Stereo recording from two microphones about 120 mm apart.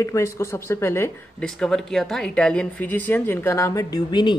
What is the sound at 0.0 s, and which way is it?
Speech, 25° left (ahead or behind).